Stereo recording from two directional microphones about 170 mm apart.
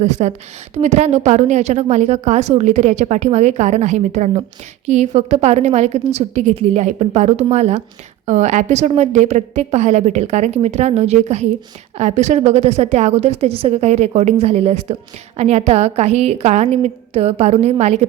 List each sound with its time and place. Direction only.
0.0 s a woman's voice: 45° right (ahead or behind)